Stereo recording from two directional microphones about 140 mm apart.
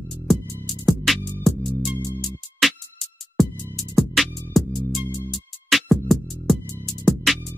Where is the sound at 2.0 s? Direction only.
25° left (ahead or behind).